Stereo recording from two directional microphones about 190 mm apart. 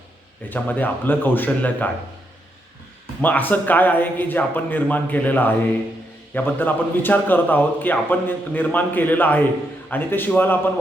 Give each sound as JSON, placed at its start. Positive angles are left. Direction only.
{"t": 0.5, "sound": "a man's voice", "side_deg": 10}
{"t": 3.2, "sound": "a man's voice", "side_deg": 10}